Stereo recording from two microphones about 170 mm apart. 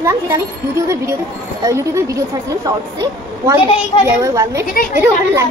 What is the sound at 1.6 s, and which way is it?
Speech, 15° right (ahead or behind).